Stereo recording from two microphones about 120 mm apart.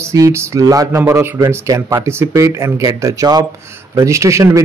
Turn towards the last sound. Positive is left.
turn(degrees=-25)  # may be behind; listen again after turning